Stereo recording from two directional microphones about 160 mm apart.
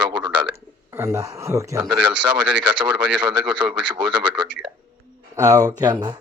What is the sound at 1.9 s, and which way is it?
Speech, 5° right (ahead or behind).